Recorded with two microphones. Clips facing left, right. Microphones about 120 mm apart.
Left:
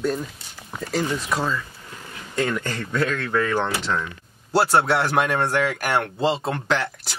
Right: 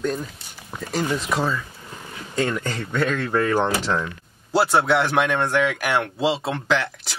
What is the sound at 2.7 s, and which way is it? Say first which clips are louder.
Speech: right 1 dB; 20° right (ahead or behind).